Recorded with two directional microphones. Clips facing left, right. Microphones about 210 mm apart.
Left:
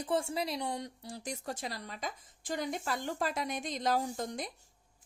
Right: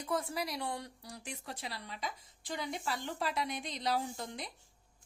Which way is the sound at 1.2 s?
40° left (ahead or behind).